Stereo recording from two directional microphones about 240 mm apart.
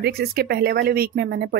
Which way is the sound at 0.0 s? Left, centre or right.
Right.